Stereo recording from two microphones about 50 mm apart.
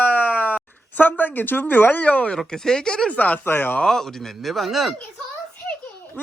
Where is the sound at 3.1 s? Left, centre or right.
Left.